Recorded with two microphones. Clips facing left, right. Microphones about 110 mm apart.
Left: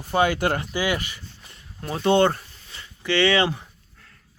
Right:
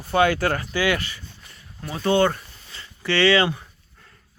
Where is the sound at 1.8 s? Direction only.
30° left (ahead or behind).